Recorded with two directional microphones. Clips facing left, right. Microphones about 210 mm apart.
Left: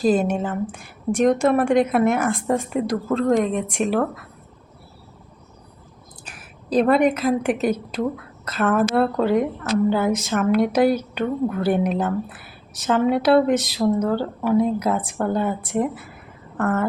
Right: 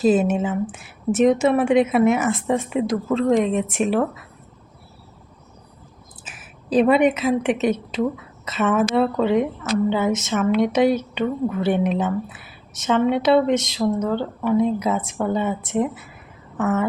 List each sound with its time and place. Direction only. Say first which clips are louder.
0.0 s speech: right 2 dB; 5° right (ahead or behind)
6.2 s a woman's voice: right 1 dB; 5° right (ahead or behind)